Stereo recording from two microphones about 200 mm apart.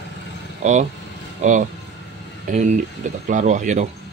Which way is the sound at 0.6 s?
35° right (ahead or behind).